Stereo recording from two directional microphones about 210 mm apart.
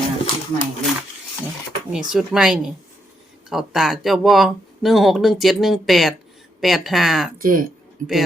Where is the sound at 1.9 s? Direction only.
5° right (ahead or behind).